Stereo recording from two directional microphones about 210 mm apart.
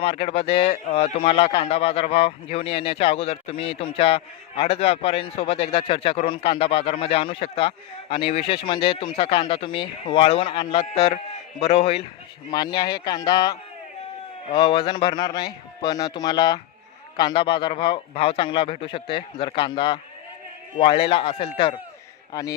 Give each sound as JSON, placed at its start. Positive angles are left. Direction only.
{"t": 0.0, "sound": "speech", "side_deg": 25}
{"t": 22.3, "sound": "speech", "side_deg": 15}